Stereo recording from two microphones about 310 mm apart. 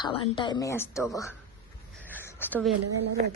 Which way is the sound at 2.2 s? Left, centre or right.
Centre.